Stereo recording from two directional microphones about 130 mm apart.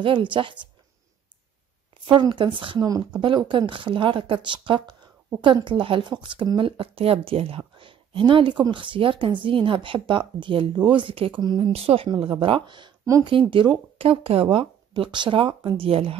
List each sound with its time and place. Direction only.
0.0 s a woman's voice: 40° right (ahead or behind)
2.0 s a woman's voice: 40° right (ahead or behind)